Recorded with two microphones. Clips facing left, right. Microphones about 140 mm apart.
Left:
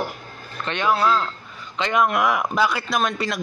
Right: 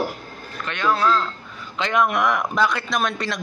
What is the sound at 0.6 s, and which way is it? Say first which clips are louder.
Speech: even; 25° left (ahead or behind).